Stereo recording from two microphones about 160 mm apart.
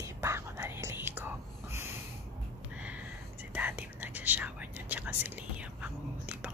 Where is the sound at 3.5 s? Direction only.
10° right (ahead or behind).